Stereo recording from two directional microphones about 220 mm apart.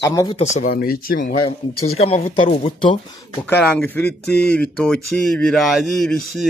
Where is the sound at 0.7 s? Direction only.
40° left (ahead or behind).